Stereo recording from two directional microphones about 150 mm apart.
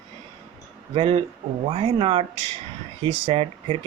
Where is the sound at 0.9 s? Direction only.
40° right (ahead or behind).